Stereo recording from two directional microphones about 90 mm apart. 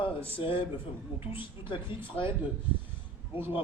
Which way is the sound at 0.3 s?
75° left (ahead or behind).